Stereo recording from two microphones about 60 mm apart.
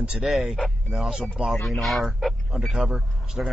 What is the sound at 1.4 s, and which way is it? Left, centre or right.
Speech, centre.